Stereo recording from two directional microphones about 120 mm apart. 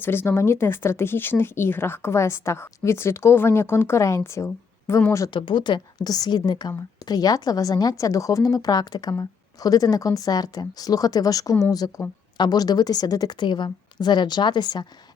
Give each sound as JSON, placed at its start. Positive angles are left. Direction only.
{"t": 0.0, "sound": "speech", "side_deg": 20}
{"t": 5.3, "sound": "a woman's voice", "side_deg": 40}